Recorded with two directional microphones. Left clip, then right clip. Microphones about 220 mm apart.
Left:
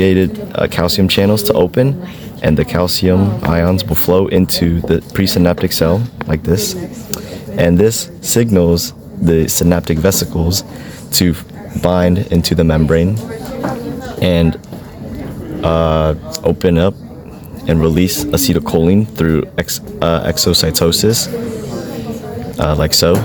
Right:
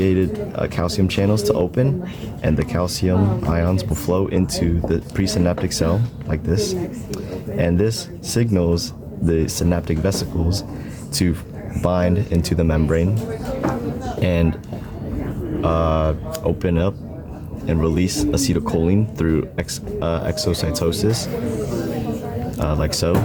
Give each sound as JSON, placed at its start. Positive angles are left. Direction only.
{"t": 0.0, "sound": "speech", "side_deg": 45}
{"t": 14.2, "sound": "speech", "side_deg": 35}
{"t": 15.6, "sound": "speech", "side_deg": 35}
{"t": 22.5, "sound": "speech", "side_deg": 40}